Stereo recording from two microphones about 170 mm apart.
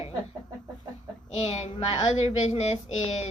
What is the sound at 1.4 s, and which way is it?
Speech, 40° left (ahead or behind).